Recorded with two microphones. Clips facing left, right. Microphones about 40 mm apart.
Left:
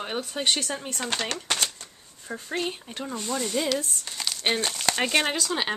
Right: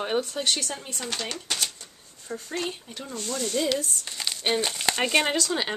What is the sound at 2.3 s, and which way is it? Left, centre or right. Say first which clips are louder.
Speech: left 1 dB; left.